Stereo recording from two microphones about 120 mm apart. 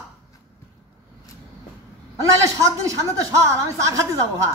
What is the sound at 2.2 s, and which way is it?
Speech, 25° right (ahead or behind).